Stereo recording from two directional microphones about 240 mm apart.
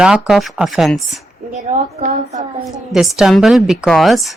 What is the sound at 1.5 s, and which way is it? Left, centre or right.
Speech, right.